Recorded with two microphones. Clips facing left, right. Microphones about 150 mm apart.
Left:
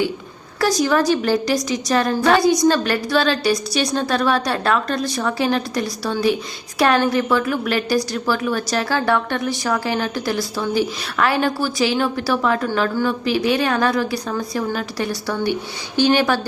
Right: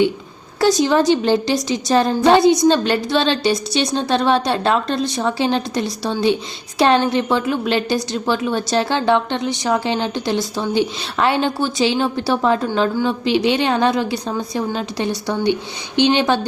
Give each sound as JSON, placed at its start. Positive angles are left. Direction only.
{"t": 0.6, "sound": "a woman's voice", "side_deg": -25}